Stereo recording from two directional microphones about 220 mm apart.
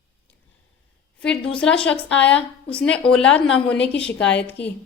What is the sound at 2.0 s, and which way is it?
Speech, 55° left (ahead or behind).